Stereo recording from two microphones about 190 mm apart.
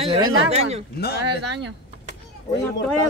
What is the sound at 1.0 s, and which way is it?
Speech, 55° left (ahead or behind).